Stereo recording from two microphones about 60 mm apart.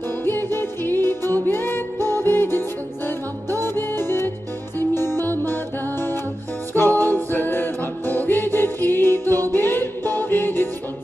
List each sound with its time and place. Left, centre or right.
0.2 s music: left